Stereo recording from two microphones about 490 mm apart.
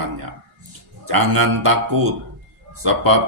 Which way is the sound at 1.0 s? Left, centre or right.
Right.